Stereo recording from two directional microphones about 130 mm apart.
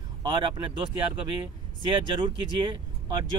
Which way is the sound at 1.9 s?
40° right (ahead or behind).